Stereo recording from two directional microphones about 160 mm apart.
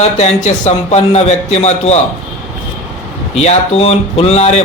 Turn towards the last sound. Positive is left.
turn(degrees=40)  # may be behind; listen again after turning